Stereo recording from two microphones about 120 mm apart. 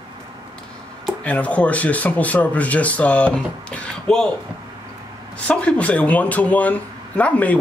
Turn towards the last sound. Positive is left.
turn(degrees=10)  # may be behind; listen again after turning